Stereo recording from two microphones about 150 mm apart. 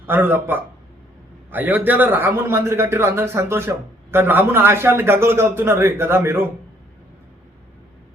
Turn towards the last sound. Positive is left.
turn(degrees=-15)  # may be behind; listen again after turning